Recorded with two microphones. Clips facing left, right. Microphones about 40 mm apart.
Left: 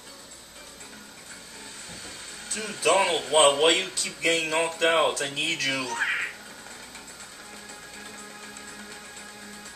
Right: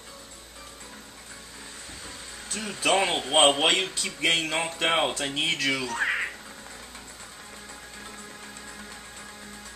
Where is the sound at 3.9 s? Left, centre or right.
Right.